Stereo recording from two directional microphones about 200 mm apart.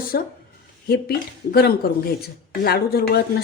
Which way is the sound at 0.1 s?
50° left (ahead or behind).